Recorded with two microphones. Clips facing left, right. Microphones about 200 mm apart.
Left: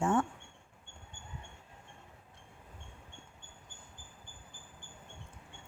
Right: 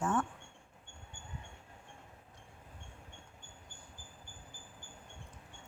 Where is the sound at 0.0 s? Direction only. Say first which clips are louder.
Left 4 dB; 25° left (ahead or behind).